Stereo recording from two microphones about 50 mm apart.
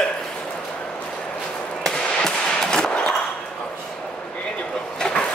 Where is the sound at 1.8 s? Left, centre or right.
Centre.